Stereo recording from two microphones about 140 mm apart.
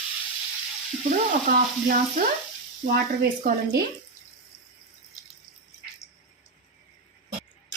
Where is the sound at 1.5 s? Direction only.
75° right (ahead or behind).